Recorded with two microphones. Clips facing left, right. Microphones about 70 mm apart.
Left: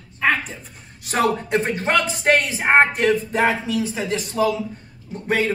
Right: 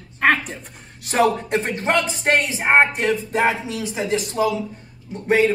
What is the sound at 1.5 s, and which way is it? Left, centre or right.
Speech, centre.